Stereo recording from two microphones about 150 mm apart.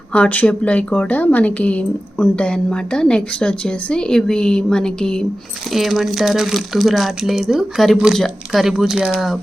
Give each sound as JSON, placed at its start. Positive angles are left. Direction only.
{"t": 0.1, "sound": "a woman's voice", "side_deg": 10}